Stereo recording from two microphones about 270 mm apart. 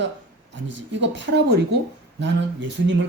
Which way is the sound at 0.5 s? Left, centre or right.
Right.